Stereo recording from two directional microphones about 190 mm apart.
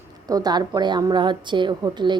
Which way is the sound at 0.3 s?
20° right (ahead or behind).